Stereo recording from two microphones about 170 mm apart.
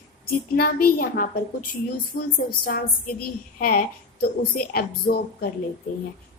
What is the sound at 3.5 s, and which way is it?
Speech, 55° left (ahead or behind).